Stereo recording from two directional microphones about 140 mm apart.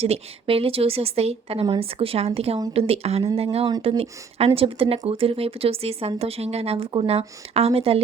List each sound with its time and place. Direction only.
0.0 s speech: 45° right (ahead or behind)